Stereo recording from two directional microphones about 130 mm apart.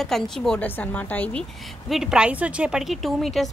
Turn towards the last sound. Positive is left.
turn(degrees=0)  # may be behind; listen again after turning